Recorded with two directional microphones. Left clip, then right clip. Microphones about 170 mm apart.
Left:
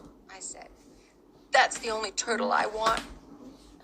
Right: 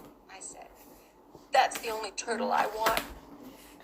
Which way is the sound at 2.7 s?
15° right (ahead or behind).